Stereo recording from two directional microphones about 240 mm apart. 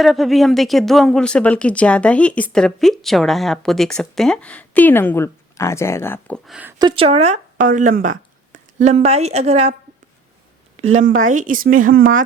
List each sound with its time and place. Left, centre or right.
0.0 s speech: centre
6.7 s speech: right
10.9 s speech: right